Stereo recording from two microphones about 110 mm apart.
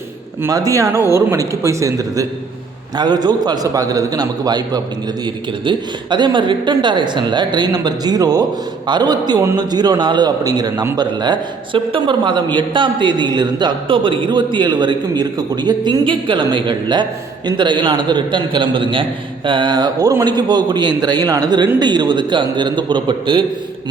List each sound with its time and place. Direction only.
0.7 s a man's voice: 25° right (ahead or behind); by 23.5 s 50° right (ahead or behind)